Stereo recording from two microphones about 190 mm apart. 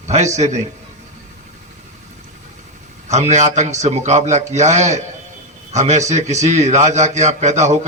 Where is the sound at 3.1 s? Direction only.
35° right (ahead or behind).